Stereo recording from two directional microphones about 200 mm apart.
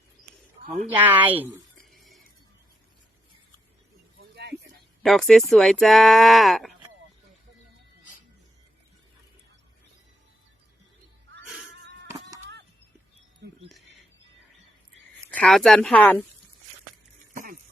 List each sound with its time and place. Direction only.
0.6 s speech: 35° right (ahead or behind)
0.9 s speech: 10° right (ahead or behind)
1.9 s music: centre (ahead or behind)
4.2 s a sound: 55° right (ahead or behind)
5.0 s speech: centre (ahead or behind)
11.4 s cat: centre (ahead or behind)
15.3 s speech: 5° left (ahead or behind)
17.3 s a sound: 45° right (ahead or behind)